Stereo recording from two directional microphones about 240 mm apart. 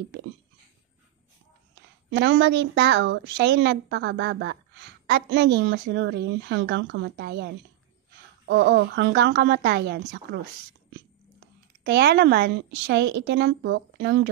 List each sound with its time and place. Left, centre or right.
2.0 s a woman's voice: right